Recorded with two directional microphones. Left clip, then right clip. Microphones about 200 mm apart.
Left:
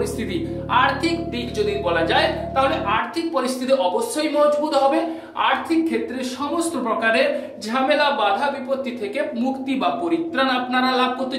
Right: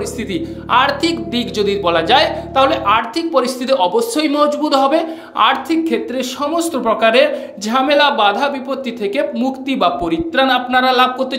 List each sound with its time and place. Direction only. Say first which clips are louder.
0.3 s speech: right 8 dB; 40° right (ahead or behind)